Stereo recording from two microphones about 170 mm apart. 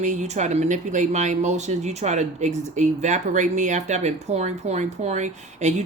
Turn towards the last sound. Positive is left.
turn(degrees=-40)  # may be behind; listen again after turning